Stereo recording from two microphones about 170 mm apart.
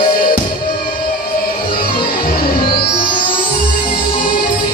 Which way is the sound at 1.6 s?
30° left (ahead or behind).